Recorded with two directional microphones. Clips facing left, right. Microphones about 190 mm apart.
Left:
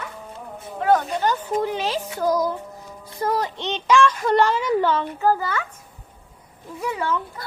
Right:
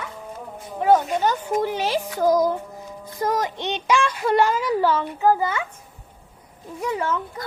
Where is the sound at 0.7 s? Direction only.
15° right (ahead or behind).